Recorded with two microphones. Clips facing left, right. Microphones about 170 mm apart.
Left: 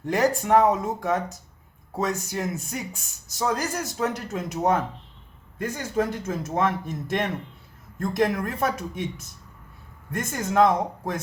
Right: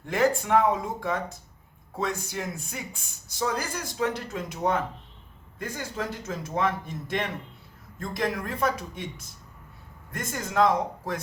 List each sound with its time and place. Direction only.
0.0 s speech: 40° left (ahead or behind)
10.2 s speech: 50° left (ahead or behind)